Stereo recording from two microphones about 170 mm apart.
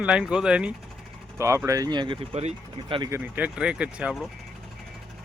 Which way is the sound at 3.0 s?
15° right (ahead or behind).